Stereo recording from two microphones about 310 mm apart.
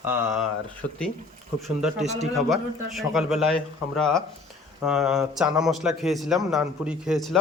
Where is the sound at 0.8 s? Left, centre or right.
Left.